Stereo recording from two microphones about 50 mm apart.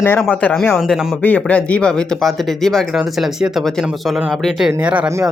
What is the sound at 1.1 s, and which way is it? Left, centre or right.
Speech, left.